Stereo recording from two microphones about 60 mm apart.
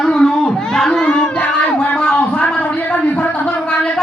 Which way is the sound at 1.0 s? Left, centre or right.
Centre.